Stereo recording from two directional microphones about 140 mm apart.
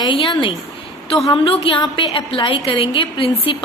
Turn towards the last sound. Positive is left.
turn(degrees=40)  # may be behind; listen again after turning